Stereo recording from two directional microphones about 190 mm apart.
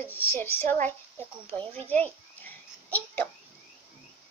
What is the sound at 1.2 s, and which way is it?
A child's voice, 10° left (ahead or behind).